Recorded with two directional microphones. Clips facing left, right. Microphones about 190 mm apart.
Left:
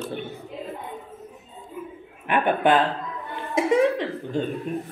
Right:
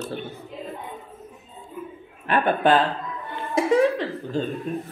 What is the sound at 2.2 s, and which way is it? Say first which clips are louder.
Speech: even; 15° left (ahead or behind).